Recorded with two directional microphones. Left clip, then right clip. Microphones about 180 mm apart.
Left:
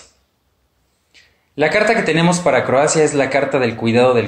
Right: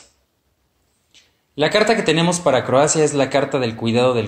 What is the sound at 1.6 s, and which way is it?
Speech, 30° right (ahead or behind).